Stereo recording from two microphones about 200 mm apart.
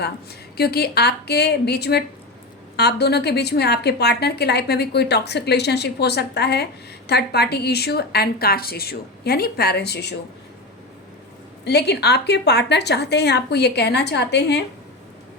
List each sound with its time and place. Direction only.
0.5 s a woman's voice: 50° left (ahead or behind)
11.6 s a woman's voice: 55° left (ahead or behind)